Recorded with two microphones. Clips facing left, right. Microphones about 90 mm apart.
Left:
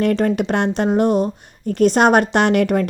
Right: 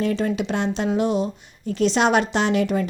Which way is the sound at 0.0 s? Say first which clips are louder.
Left 5 dB; 55° left (ahead or behind).